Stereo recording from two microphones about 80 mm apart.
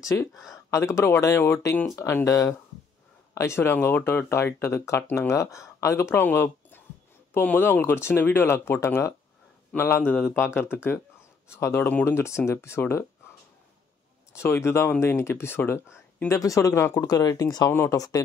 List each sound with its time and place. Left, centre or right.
0.0 s speech: left
14.3 s speech: left
16.3 s speech: left
17.1 s speech: left
17.6 s speech: left
17.9 s speech: left